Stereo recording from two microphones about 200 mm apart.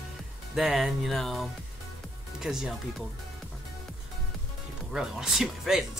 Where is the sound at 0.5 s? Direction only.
Centre (ahead or behind).